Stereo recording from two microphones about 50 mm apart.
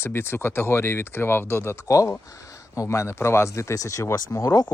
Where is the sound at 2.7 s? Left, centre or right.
Left.